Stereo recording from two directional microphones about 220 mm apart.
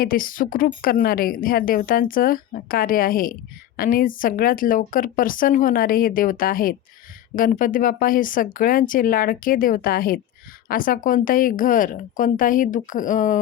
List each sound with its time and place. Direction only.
0.0 s a woman's voice: 40° left (ahead or behind)